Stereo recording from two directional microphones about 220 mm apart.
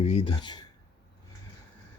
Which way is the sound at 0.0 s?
30° left (ahead or behind).